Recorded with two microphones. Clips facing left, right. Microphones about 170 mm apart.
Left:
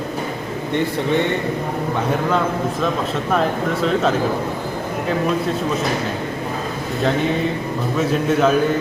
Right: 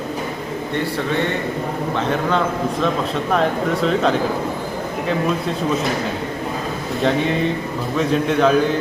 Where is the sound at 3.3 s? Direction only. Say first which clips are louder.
Right 1 dB; centre (ahead or behind).